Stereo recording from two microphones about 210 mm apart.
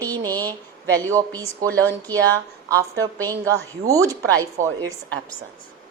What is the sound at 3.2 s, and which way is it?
Speech, 15° right (ahead or behind).